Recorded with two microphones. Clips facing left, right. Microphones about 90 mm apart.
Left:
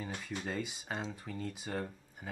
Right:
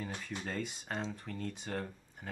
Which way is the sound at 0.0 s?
5° left (ahead or behind).